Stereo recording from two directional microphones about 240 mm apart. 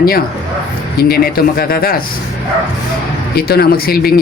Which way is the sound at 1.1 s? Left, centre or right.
Left.